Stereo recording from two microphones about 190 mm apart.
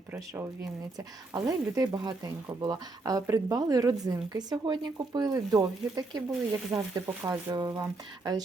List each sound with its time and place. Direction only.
0.9 s speech: 20° right (ahead or behind)